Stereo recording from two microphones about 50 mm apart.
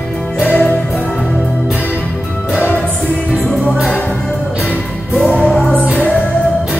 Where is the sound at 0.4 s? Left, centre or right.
Left.